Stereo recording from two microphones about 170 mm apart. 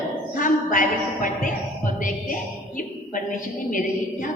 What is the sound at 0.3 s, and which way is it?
A woman's voice, 50° left (ahead or behind).